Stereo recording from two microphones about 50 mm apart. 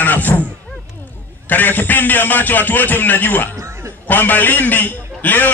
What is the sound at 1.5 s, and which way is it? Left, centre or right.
Speech, left.